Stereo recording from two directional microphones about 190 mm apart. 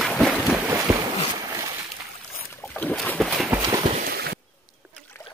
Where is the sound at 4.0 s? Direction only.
55° right (ahead or behind).